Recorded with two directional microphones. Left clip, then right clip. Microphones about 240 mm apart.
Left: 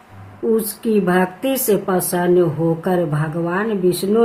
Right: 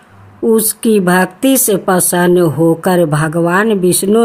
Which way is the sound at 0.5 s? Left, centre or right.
Right.